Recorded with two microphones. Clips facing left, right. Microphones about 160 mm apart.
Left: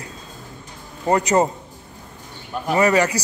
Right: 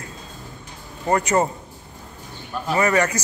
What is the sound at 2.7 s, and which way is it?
Speech, 30° left (ahead or behind).